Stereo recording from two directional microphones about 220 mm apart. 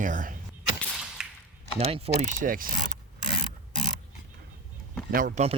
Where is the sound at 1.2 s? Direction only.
Centre (ahead or behind).